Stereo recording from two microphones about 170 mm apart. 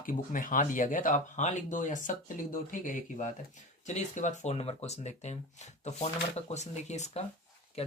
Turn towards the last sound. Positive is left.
turn(degrees=35)  # may be behind; listen again after turning